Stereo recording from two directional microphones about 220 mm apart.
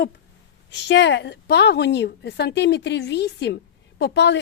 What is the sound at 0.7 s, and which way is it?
A woman's voice, 55° left (ahead or behind).